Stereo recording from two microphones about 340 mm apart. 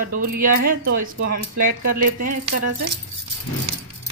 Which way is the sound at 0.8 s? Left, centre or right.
Right.